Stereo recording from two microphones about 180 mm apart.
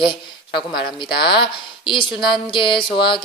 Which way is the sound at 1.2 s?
25° left (ahead or behind).